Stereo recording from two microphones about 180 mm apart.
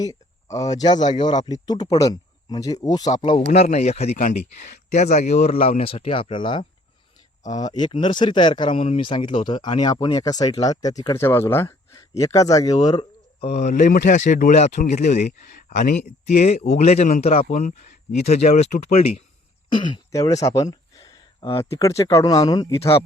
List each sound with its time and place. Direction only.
0.0 s speech: 20° left (ahead or behind)
3.5 s speech: 40° left (ahead or behind)
19.7 s speech: 20° left (ahead or behind)